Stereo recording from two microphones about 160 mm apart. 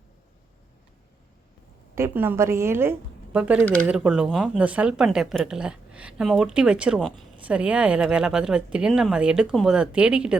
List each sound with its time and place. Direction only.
2.0 s a woman's voice: 15° right (ahead or behind)